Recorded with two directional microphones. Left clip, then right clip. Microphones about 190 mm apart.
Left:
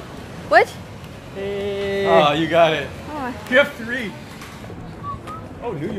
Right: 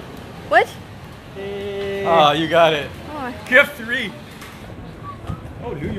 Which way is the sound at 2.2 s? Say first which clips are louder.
Right 1 dB; 30° right (ahead or behind).